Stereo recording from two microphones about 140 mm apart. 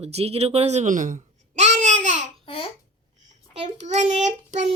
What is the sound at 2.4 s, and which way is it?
Babbling, 40° left (ahead or behind).